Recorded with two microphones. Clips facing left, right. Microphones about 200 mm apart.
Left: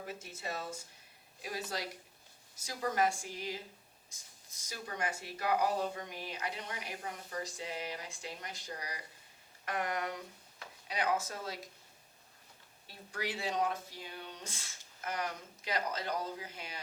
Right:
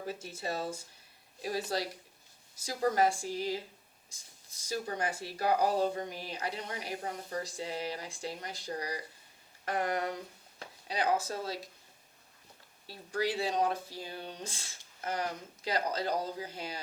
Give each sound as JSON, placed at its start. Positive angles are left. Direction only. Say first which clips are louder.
{"t": 0.0, "sound": "speech", "louder": "right 5 dB", "side_deg": -30}
{"t": 12.9, "sound": "speech", "louder": "right 7 dB", "side_deg": -35}